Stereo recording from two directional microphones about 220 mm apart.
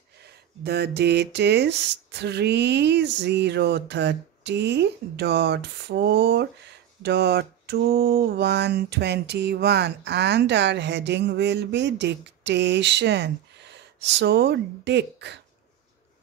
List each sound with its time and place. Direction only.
0.7 s mantra: 50° right (ahead or behind)